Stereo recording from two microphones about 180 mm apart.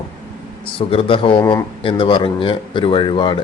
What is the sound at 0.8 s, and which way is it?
A man's voice, 30° left (ahead or behind).